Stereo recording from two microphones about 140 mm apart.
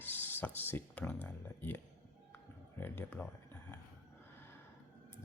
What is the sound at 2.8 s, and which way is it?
Speech, 15° left (ahead or behind).